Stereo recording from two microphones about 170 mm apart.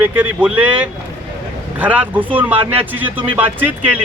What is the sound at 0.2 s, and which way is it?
Speech, 5° right (ahead or behind).